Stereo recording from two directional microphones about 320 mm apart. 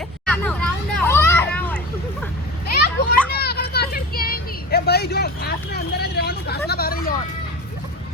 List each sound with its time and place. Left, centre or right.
0.3 s vehicle: centre
2.7 s children playing: left
3.3 s vehicle: left